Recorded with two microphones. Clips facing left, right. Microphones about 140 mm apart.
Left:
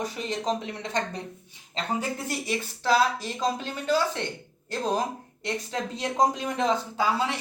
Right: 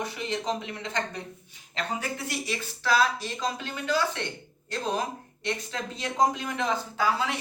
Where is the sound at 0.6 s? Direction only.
40° left (ahead or behind).